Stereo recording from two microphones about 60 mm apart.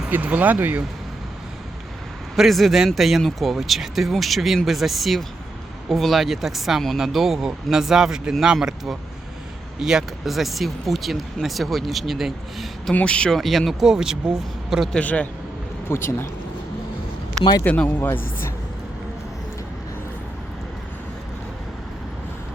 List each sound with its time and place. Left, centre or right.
0.1 s speech: right
2.3 s speech: centre
12.9 s speech: left
13.3 s speech: centre
14.9 s a man's voice: left
15.9 s speech: left
17.6 s speech: left